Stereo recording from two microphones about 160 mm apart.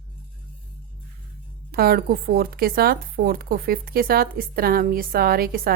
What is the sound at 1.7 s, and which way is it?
Speech, 70° right (ahead or behind).